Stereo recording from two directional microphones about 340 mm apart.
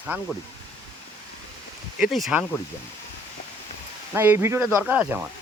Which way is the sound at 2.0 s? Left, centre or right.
Centre.